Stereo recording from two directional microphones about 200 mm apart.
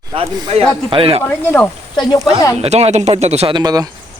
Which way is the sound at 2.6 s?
30° right (ahead or behind).